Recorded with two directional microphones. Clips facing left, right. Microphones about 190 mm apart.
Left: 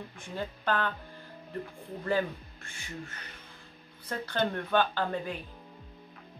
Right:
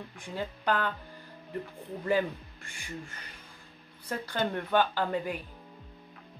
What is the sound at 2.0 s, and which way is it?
Speech, 15° right (ahead or behind).